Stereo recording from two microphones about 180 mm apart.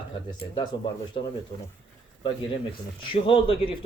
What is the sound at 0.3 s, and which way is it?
Speech, 25° left (ahead or behind).